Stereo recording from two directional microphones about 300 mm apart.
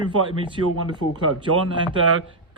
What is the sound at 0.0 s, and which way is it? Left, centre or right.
Speech, centre.